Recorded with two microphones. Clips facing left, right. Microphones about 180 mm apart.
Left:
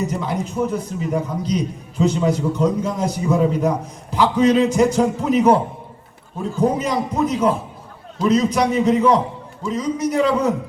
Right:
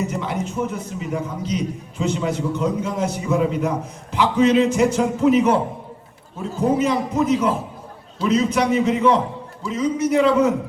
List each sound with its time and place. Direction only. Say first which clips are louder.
0.0 s a man's voice: left 1 dB; 35° left (ahead or behind)
6.6 s a man's voice: right 1 dB; 35° left (ahead or behind)